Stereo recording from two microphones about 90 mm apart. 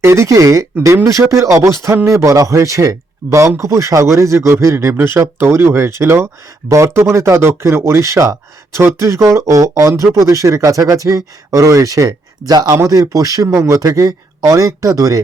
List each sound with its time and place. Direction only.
0.0 s speech: 30° right (ahead or behind); by 12.7 s 50° right (ahead or behind)
12.7 s speech: 40° right (ahead or behind)